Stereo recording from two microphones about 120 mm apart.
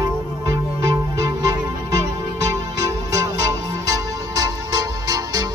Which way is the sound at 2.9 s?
30° right (ahead or behind).